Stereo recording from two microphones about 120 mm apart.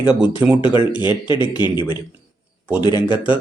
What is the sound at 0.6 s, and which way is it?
Speech, 45° left (ahead or behind).